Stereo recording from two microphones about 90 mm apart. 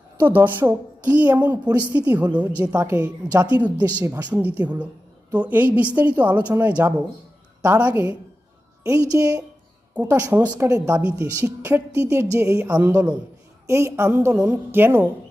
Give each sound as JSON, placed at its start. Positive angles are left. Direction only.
{"t": 0.3, "sound": "a woman's voice", "side_deg": -20}
{"t": 8.8, "sound": "a woman's voice", "side_deg": -35}
{"t": 9.9, "sound": "a woman's voice", "side_deg": -15}
{"t": 10.6, "sound": "speech", "side_deg": -40}
{"t": 10.8, "sound": "a woman's voice", "side_deg": -20}
{"t": 11.2, "sound": "a woman's voice", "side_deg": -35}
{"t": 13.7, "sound": "a woman's voice", "side_deg": -30}
{"t": 14.3, "sound": "a woman's voice", "side_deg": -20}